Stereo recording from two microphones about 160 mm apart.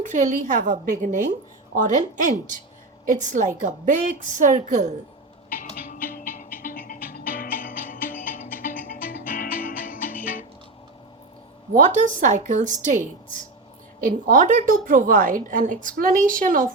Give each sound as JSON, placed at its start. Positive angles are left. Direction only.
{"t": 0.0, "sound": "a woman's voice", "side_deg": -50}
{"t": 5.6, "sound": "music", "side_deg": 55}
{"t": 11.9, "sound": "a woman's voice", "side_deg": -50}